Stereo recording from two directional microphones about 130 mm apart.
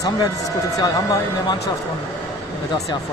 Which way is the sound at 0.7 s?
30° left (ahead or behind).